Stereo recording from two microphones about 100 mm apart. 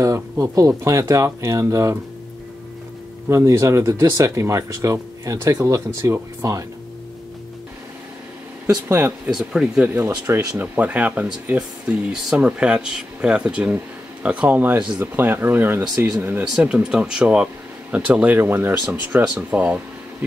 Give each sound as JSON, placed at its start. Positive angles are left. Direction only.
{"t": 0.0, "sound": "speech", "side_deg": -35}
{"t": 3.3, "sound": "speech", "side_deg": -30}
{"t": 8.8, "sound": "speech", "side_deg": -25}
{"t": 9.2, "sound": "speech", "side_deg": -5}
{"t": 9.9, "sound": "speech", "side_deg": -25}
{"t": 10.6, "sound": "speech", "side_deg": -15}
{"t": 16.5, "sound": "speech", "side_deg": -5}
{"t": 19.2, "sound": "speech", "side_deg": -10}